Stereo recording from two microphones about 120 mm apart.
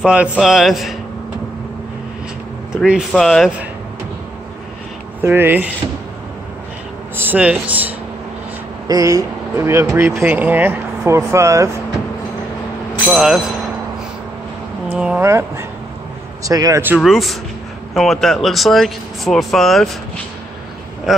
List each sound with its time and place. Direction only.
0.0 s speech: 10° right (ahead or behind)
2.7 s speech: 5° right (ahead or behind)
5.2 s speech: 20° right (ahead or behind)
7.2 s speech: 15° right (ahead or behind)
8.8 s speech: 30° right (ahead or behind)
13.1 s speech: 5° right (ahead or behind)
14.9 s speech: 10° right (ahead or behind)
15.2 s speech: 20° right (ahead or behind)
17.0 s speech: centre (ahead or behind)